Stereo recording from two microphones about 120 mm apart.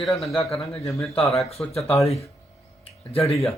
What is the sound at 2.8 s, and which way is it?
Speech, 55° left (ahead or behind).